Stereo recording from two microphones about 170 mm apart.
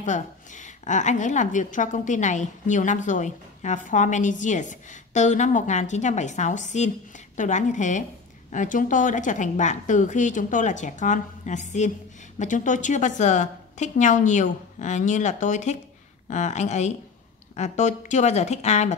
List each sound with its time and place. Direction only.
0.0 s a woman's voice: 45° left (ahead or behind)